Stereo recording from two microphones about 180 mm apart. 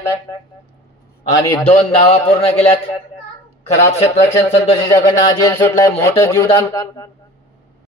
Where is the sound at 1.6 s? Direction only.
35° left (ahead or behind).